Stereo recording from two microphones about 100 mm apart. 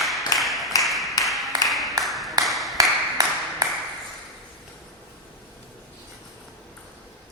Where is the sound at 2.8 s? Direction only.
35° right (ahead or behind).